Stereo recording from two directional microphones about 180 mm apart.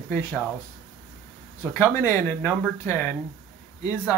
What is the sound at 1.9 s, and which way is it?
Speech, 15° left (ahead or behind).